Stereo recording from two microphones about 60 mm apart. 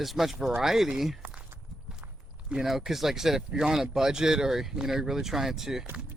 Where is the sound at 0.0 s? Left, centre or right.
Centre.